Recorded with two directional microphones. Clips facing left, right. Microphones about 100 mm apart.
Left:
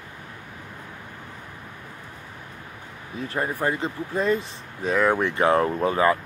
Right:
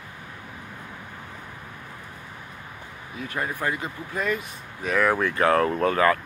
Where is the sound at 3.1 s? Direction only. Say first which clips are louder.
Left 3 dB; 30° left (ahead or behind).